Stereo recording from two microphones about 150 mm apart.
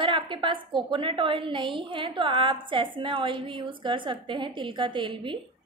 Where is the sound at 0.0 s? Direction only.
35° right (ahead or behind).